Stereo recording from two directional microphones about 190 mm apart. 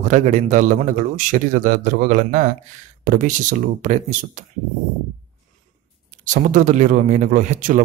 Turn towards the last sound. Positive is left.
turn(degrees=-40)  # may be behind; listen again after turning